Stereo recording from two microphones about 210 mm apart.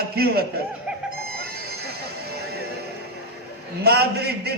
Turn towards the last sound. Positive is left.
turn(degrees=-50)  # may be behind; listen again after turning